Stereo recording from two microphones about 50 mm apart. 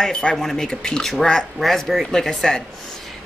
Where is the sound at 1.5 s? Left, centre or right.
Centre.